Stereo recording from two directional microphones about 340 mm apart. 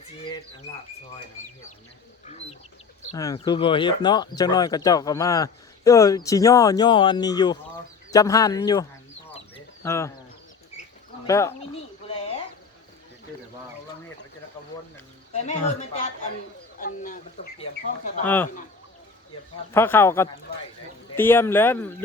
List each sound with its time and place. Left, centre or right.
2.2 s speech: centre
9.3 s a sound: centre
11.3 s speech: centre
12.0 s a sound: centre
14.9 s speech: centre
16.8 s speech: left
19.7 s speech: centre